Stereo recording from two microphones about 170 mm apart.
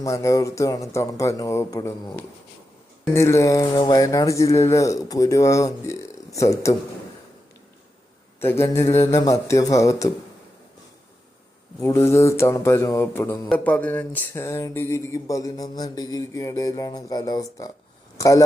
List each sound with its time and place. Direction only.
0.0 s speech: 20° left (ahead or behind)
3.1 s a sound: 15° left (ahead or behind)
8.4 s speech: 15° left (ahead or behind)
11.8 s speech: 15° left (ahead or behind)
13.5 s a sound: 10° left (ahead or behind)
18.2 s speech: 20° left (ahead or behind)